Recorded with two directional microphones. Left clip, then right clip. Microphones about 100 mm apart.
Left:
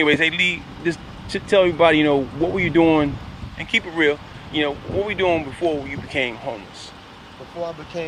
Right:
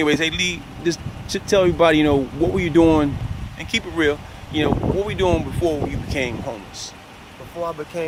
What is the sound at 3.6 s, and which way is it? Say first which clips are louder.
Speech: left 2 dB; 85° right.